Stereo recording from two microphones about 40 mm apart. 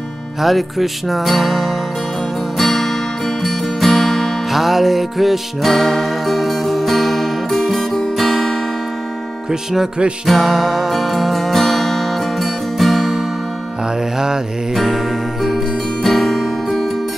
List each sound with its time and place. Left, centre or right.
0.4 s music: centre
4.5 s music: centre
9.5 s speech: centre
10.2 s music: centre
14.1 s mantra: centre
14.7 s music: centre